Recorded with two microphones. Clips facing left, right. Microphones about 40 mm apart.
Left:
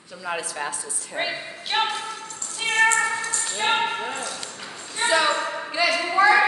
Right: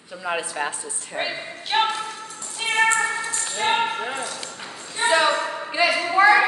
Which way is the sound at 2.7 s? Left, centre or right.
Centre.